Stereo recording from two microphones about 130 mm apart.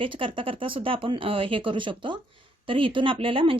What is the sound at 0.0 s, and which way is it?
Speech, 40° right (ahead or behind).